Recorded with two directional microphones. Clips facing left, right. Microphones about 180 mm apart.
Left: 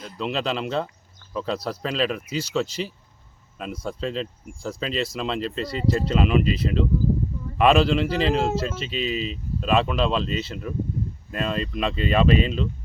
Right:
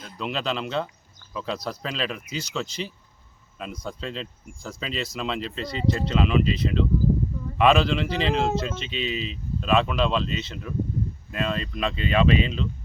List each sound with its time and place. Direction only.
0.0 s speech: centre (ahead or behind)
9.1 s speech: 45° left (ahead or behind)
9.6 s speech: centre (ahead or behind)